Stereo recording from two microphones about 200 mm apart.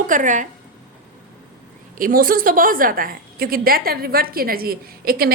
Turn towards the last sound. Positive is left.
turn(degrees=-50)  # may be behind; listen again after turning